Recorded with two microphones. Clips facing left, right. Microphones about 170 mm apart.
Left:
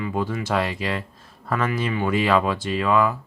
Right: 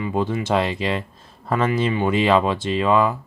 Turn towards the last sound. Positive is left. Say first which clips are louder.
# right 2 dB
turn(degrees=-25)  # may be behind; listen again after turning